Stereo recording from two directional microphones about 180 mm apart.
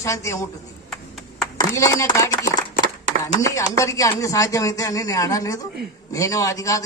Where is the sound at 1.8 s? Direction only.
15° left (ahead or behind).